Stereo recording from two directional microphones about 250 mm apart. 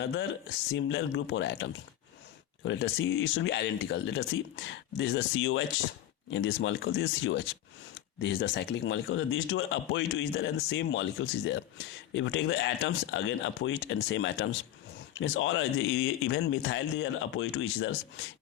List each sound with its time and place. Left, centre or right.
0.0 s a man's voice: left